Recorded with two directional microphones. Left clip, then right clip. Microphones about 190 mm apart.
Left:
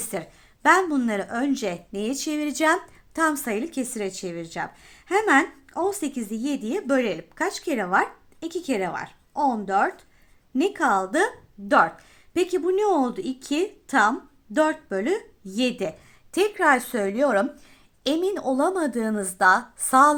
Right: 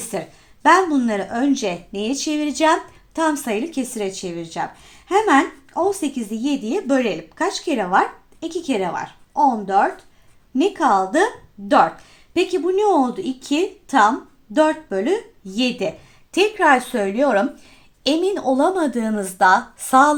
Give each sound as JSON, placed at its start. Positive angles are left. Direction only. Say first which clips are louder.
{"t": 0.6, "sound": "a woman's voice", "louder": "right 5 dB", "side_deg": 35}